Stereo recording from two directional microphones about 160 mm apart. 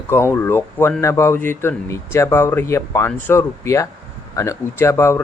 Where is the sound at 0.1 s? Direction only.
15° left (ahead or behind).